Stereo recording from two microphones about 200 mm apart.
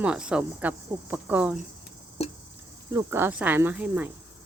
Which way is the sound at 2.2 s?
30° left (ahead or behind).